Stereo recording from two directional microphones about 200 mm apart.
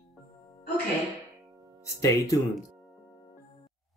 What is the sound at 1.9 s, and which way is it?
Speech, 15° left (ahead or behind).